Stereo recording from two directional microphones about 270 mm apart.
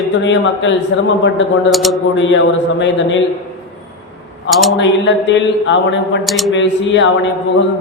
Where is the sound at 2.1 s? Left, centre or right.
Left.